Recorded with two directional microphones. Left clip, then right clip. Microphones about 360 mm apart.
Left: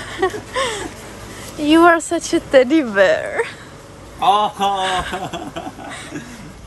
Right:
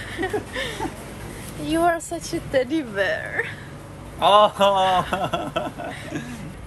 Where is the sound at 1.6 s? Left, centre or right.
Left.